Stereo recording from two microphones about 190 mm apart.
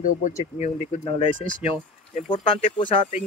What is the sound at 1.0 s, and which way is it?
Speech, 30° left (ahead or behind).